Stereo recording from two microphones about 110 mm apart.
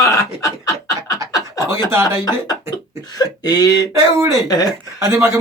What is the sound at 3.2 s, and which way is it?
Speech, 35° left (ahead or behind).